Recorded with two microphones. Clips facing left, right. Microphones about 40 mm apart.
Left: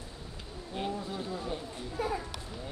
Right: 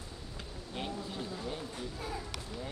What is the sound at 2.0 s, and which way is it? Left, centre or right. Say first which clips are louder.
Children playing: left 11 dB; left.